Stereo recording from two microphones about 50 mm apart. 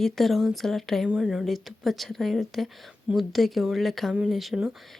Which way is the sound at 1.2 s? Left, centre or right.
Centre.